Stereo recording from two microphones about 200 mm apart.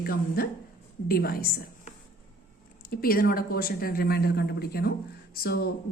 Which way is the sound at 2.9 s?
45° left (ahead or behind).